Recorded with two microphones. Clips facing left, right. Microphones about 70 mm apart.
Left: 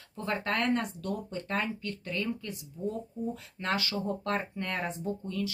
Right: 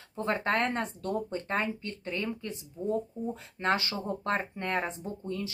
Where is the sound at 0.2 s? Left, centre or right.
Right.